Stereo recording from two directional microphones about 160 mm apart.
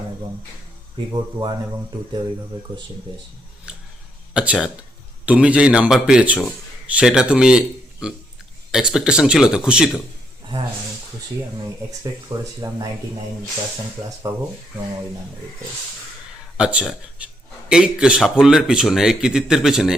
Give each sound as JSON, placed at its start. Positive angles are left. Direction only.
{"t": 1.1, "sound": "speech", "side_deg": -30}
{"t": 3.7, "sound": "a sound", "side_deg": -5}
{"t": 4.4, "sound": "a man's voice", "side_deg": -5}
{"t": 11.9, "sound": "speech", "side_deg": -20}
{"t": 16.6, "sound": "a man's voice", "side_deg": -5}